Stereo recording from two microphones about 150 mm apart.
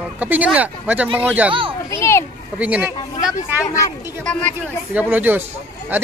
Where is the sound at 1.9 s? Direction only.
15° left (ahead or behind).